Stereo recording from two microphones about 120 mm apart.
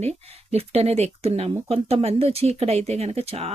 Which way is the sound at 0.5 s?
60° right (ahead or behind).